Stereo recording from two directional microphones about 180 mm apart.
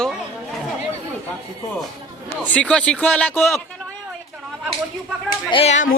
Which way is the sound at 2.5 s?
5° left (ahead or behind).